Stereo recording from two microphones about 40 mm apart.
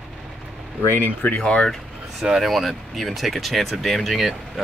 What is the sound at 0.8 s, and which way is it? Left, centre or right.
Speech, left.